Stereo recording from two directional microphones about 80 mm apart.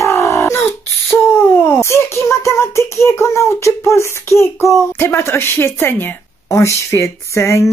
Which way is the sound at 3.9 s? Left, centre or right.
Left.